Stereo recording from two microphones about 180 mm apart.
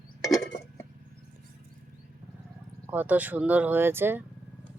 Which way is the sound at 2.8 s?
10° right (ahead or behind).